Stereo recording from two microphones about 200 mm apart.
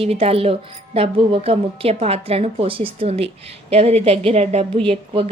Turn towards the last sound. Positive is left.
turn(degrees=-30)  # may be behind; listen again after turning